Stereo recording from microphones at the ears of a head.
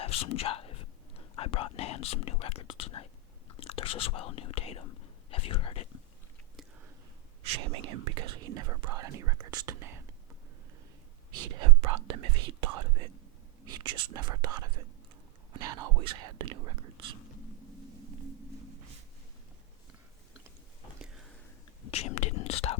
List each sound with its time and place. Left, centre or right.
0.0 s whispering: left
3.5 s speech: left
7.4 s speech: right
11.3 s speech: right
21.8 s whispering: left